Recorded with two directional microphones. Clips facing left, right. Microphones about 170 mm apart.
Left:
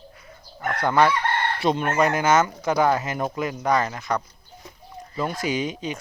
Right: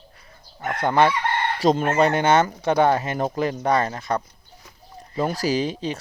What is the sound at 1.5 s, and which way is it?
Speech, 40° right (ahead or behind).